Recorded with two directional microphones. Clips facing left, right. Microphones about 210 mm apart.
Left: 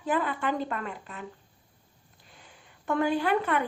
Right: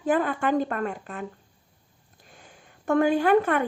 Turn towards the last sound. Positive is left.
turn(degrees=-50)  # may be behind; listen again after turning